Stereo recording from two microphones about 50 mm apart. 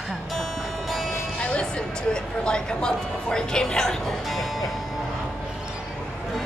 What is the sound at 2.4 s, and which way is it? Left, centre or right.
Speech, centre.